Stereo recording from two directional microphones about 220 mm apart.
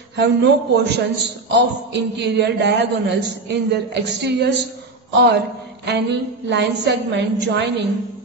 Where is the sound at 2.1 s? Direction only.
50° right (ahead or behind).